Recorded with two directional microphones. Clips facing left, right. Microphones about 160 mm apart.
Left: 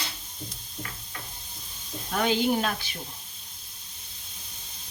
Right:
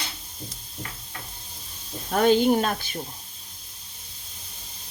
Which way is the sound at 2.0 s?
45° right (ahead or behind).